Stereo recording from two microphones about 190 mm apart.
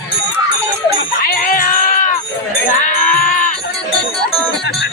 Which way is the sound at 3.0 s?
45° left (ahead or behind).